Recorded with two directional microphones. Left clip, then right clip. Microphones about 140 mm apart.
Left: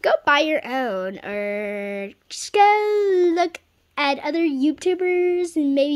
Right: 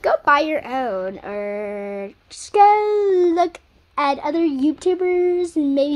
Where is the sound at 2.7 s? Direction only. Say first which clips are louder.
Right 2 dB; 45° left (ahead or behind).